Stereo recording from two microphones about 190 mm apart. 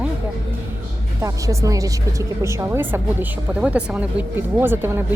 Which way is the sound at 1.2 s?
15° right (ahead or behind).